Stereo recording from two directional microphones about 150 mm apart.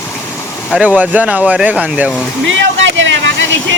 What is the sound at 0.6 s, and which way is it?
Speech, centre (ahead or behind).